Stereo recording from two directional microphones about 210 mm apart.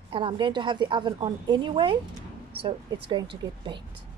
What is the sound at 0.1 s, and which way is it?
A woman's voice, 20° right (ahead or behind).